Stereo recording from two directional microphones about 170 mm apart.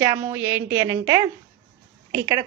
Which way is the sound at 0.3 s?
15° right (ahead or behind).